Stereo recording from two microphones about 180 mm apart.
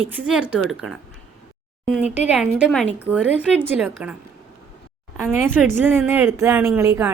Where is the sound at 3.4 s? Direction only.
5° right (ahead or behind).